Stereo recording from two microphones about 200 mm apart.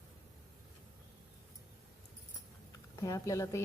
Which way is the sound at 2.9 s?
15° left (ahead or behind).